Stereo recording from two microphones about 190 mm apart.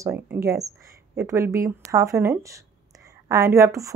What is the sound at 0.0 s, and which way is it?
Speech, 15° right (ahead or behind).